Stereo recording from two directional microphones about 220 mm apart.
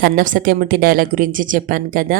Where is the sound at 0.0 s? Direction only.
40° right (ahead or behind).